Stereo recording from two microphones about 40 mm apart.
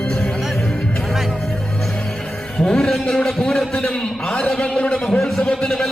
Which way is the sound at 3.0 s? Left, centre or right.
Centre.